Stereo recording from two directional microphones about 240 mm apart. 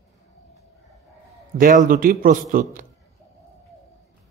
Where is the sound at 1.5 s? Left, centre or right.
Right.